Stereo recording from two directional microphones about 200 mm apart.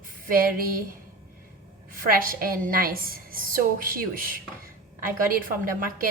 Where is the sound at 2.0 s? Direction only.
45° right (ahead or behind).